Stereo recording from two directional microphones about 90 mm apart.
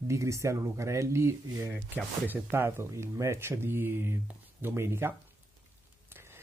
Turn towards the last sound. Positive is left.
turn(degrees=-25)  # may be behind; listen again after turning